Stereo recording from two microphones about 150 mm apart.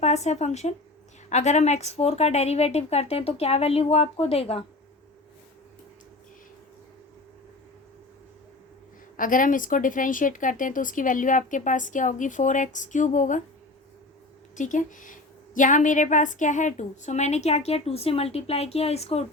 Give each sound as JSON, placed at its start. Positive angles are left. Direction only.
{"t": 0.0, "sound": "a woman's voice", "side_deg": 50}
{"t": 9.1, "sound": "speech", "side_deg": 65}
{"t": 14.5, "sound": "a woman's voice", "side_deg": 60}